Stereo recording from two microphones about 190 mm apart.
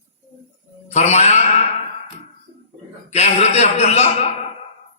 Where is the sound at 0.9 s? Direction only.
35° left (ahead or behind).